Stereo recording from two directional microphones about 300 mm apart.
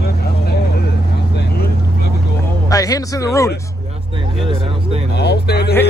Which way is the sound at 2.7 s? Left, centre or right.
Centre.